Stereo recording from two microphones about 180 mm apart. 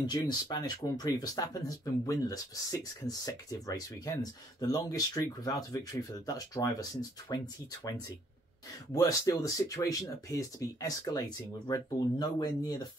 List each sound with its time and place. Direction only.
0.0 s speech: 25° left (ahead or behind)
8.9 s speech: 20° left (ahead or behind)